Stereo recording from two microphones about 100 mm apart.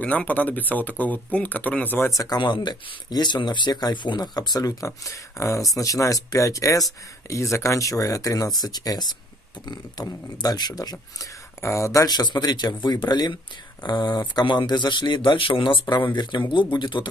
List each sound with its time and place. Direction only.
0.0 s speech: 15° left (ahead or behind)
2.0 s speech: 40° left (ahead or behind)